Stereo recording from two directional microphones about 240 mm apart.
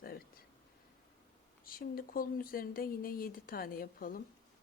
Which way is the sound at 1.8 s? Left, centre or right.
Left.